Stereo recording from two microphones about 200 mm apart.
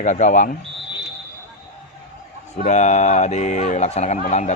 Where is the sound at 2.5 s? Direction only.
35° left (ahead or behind).